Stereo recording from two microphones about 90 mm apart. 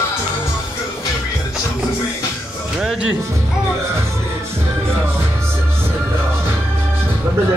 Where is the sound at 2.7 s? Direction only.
10° right (ahead or behind).